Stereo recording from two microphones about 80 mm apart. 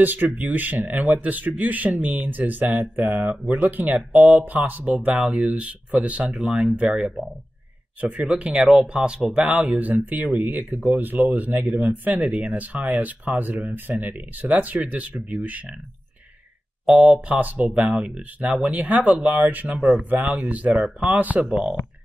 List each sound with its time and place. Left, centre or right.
0.0 s speech: right; by 7.2 s centre
8.0 s speech: centre
16.8 s speech: centre